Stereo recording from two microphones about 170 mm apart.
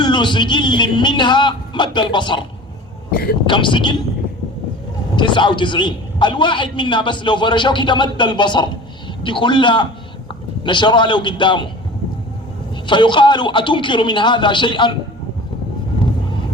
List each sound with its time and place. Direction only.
0.0 s a man's voice: 25° left (ahead or behind)
3.1 s speech: 60° left (ahead or behind)
3.4 s a man's voice: 30° left (ahead or behind)
5.1 s a man's voice: 30° left (ahead or behind)
12.7 s a man's voice: 30° left (ahead or behind)